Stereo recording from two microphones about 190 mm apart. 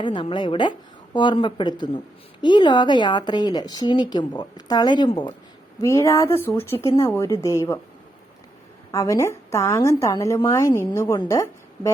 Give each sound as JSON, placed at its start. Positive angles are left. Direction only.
{"t": 0.0, "sound": "a woman's voice", "side_deg": 25}
{"t": 8.9, "sound": "a woman's voice", "side_deg": 15}